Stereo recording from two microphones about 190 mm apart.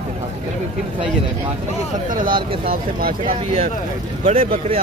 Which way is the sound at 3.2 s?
35° right (ahead or behind).